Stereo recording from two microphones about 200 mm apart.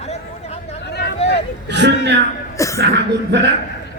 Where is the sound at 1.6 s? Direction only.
60° right (ahead or behind).